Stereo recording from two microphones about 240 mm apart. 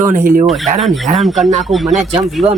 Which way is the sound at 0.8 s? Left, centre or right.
Centre.